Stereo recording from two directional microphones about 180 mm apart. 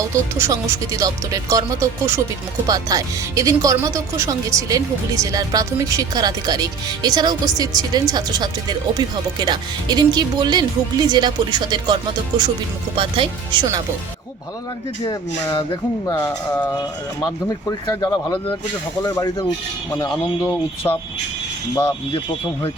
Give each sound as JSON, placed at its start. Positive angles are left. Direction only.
{"t": 0.1, "sound": "speech", "side_deg": -15}
{"t": 13.0, "sound": "speech", "side_deg": -30}
{"t": 15.0, "sound": "speech", "side_deg": 20}
{"t": 17.7, "sound": "speech", "side_deg": 20}
{"t": 20.8, "sound": "speech", "side_deg": 15}